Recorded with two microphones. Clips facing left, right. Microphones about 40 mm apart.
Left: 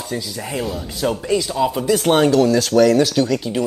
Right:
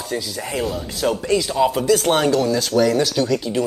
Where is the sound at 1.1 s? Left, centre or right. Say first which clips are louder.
Even; centre.